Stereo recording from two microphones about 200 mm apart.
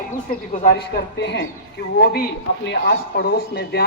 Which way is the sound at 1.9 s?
50° left (ahead or behind).